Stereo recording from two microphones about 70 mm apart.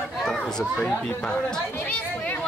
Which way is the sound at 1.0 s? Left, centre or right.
Centre.